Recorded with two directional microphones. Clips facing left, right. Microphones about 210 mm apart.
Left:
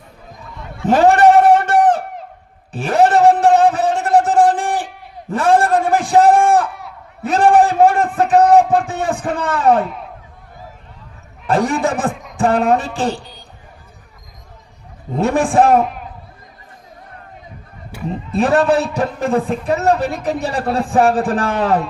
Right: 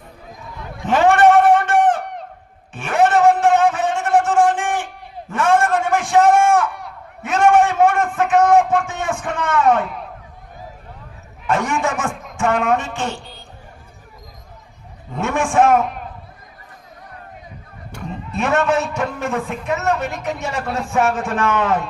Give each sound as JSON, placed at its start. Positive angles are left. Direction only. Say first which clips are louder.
{"t": 0.9, "sound": "a sound", "louder": "left 3 dB", "side_deg": 35}
{"t": 9.8, "sound": "speech", "louder": "left 2 dB", "side_deg": 0}
{"t": 11.4, "sound": "a man's voice", "louder": "left 4 dB", "side_deg": 35}
{"t": 12.1, "sound": "a sound", "louder": "left 1 dB", "side_deg": 0}
{"t": 12.4, "sound": "speech", "louder": "left 4 dB", "side_deg": 35}
{"t": 15.1, "sound": "speech", "louder": "left 4 dB", "side_deg": 35}
{"t": 18.1, "sound": "a man's voice", "louder": "left 5 dB", "side_deg": 35}